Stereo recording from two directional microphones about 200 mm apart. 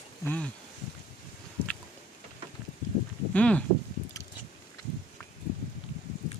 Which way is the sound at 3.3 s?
5° left (ahead or behind).